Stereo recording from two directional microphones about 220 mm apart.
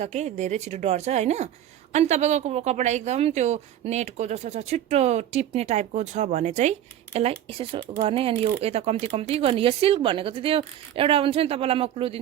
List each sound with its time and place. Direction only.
0.0 s speech: 30° right (ahead or behind)